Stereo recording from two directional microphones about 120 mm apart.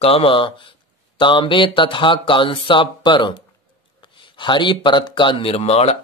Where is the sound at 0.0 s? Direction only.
50° left (ahead or behind).